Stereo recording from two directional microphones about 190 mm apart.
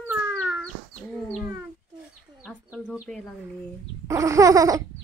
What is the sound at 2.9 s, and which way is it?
Speech, 5° left (ahead or behind).